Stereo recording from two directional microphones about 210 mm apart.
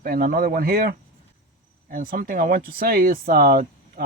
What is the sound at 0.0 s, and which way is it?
Speech, 45° right (ahead or behind).